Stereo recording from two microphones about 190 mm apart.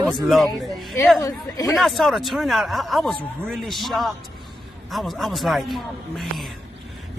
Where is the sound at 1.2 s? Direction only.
15° left (ahead or behind).